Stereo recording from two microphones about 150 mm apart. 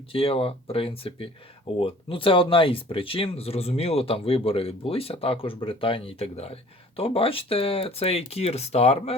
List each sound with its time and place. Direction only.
0.1 s speech: 40° left (ahead or behind)